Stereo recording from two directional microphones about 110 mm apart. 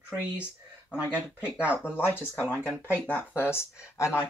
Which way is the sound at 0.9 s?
10° right (ahead or behind).